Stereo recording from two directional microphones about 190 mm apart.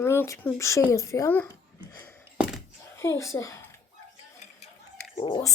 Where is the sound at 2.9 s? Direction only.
15° left (ahead or behind).